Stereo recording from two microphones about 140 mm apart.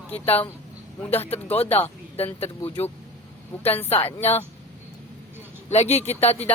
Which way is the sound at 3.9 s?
45° left (ahead or behind).